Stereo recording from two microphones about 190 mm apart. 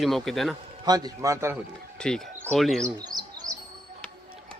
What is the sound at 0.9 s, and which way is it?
Speech, 20° right (ahead or behind).